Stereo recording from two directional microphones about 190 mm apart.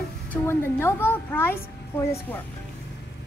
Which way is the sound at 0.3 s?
10° left (ahead or behind).